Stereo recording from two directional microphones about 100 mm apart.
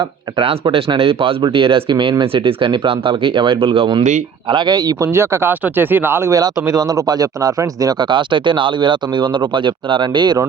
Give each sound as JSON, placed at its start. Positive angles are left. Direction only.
{"t": 0.3, "sound": "speech", "side_deg": -60}
{"t": 4.4, "sound": "speech", "side_deg": -50}
{"t": 6.3, "sound": "speech", "side_deg": -35}